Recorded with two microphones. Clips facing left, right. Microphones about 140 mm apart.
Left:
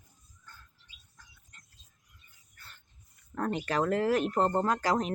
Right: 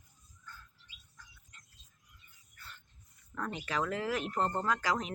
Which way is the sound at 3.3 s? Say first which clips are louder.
Left 6 dB; 45° left (ahead or behind).